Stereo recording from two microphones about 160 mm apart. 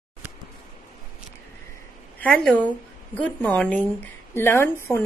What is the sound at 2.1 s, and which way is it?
A woman's voice, 5° left (ahead or behind).